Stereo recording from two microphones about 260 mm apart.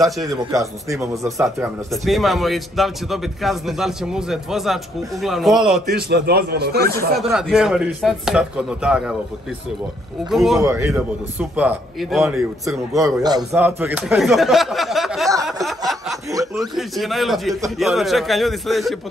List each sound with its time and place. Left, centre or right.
0.5 s a man's voice: centre
1.9 s a man's voice: centre
5.9 s a man's voice: right
7.2 s a man's voice: centre
10.3 s a man's voice: centre
15.4 s snicker: centre
16.5 s a man's voice: centre